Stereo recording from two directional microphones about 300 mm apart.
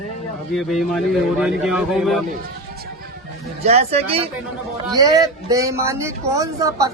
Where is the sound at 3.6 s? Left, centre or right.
Right.